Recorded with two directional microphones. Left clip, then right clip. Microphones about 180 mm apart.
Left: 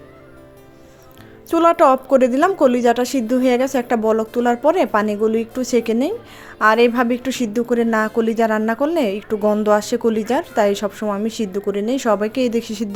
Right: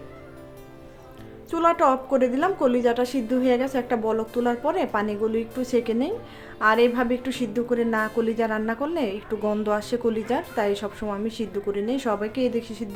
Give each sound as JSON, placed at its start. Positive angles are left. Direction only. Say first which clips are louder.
{"t": 1.5, "sound": "a woman's voice", "louder": "left 7 dB", "side_deg": 45}